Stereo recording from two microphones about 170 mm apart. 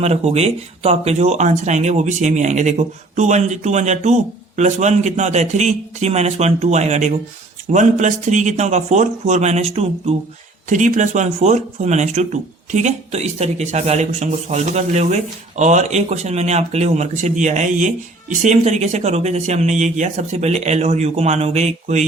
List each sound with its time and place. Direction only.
0.0 s speech: 40° right (ahead or behind)